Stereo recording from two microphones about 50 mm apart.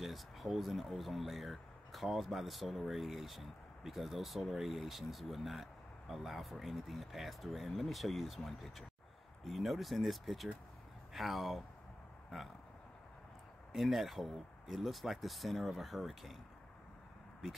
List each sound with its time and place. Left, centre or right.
0.0 s speech: centre
13.7 s speech: centre